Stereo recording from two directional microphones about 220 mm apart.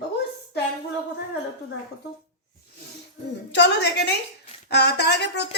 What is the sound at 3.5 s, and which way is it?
Speech, 55° left (ahead or behind).